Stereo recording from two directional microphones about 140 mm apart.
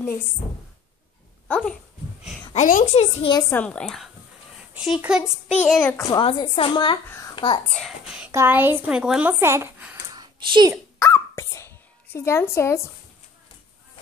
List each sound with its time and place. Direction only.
1.5 s a child's voice: 5° left (ahead or behind)
2.5 s a woman's voice: 60° left (ahead or behind)
3.3 s a woman's voice: 25° left (ahead or behind)
3.5 s a woman's voice: 10° left (ahead or behind)
5.8 s a child's voice: 10° left (ahead or behind)
6.2 s a woman's voice: 40° left (ahead or behind)
8.3 s a woman's voice: 15° right (ahead or behind)
9.4 s a woman's voice: 15° right (ahead or behind)
10.1 s a sound: 30° right (ahead or behind)
11.0 s a sound: 20° left (ahead or behind)